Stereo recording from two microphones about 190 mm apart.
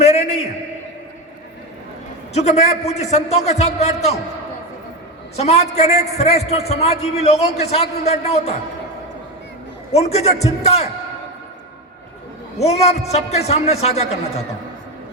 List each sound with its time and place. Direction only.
0.0 s a sound: 35° left (ahead or behind)
2.3 s a man's voice: 35° left (ahead or behind)
5.4 s a man's voice: 35° left (ahead or behind)
9.9 s a man's voice: 35° left (ahead or behind)
12.5 s a man's voice: 35° left (ahead or behind)